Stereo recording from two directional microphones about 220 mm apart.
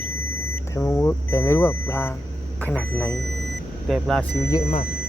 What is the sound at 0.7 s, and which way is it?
Speech, 15° left (ahead or behind).